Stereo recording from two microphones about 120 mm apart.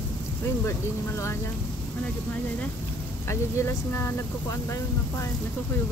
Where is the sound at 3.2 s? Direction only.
20° left (ahead or behind).